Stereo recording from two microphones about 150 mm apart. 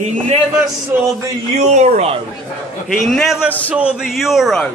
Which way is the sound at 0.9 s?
15° right (ahead or behind).